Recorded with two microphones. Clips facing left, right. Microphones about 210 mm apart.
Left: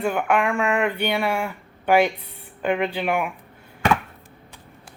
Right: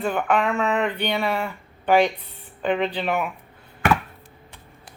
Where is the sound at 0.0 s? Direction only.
10° left (ahead or behind).